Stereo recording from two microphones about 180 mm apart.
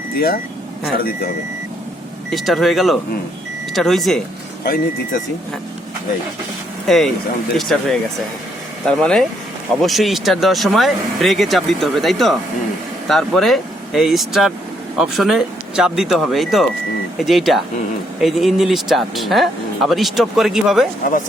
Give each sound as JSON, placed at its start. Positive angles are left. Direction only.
{"t": 2.3, "sound": "speech", "side_deg": 0}
{"t": 4.6, "sound": "speech", "side_deg": 55}
{"t": 6.8, "sound": "speech", "side_deg": 0}